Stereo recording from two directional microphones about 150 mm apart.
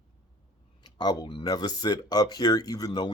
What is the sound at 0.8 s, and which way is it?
Speech, 25° left (ahead or behind).